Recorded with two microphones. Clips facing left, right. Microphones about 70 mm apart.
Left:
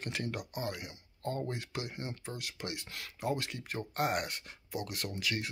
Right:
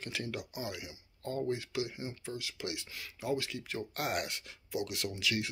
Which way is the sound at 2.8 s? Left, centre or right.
Left.